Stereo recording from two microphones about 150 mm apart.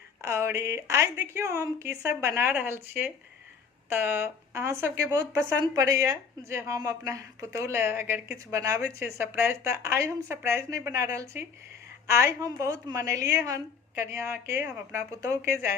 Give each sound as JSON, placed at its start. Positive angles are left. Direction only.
{"t": 0.2, "sound": "a woman's voice", "side_deg": -20}